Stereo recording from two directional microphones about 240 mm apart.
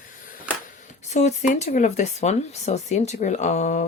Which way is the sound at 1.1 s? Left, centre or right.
Left.